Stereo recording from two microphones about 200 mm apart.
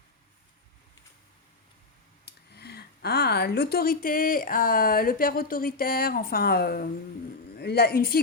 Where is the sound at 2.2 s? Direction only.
55° left (ahead or behind).